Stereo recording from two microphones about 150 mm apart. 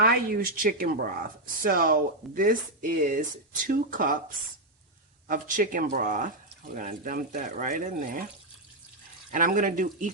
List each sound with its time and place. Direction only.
0.0 s speech: 75° right (ahead or behind)
5.3 s speech: 65° right (ahead or behind)
9.3 s speech: 65° right (ahead or behind)